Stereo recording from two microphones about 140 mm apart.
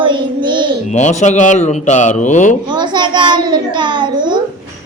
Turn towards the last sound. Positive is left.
turn(degrees=-35)  # may be behind; listen again after turning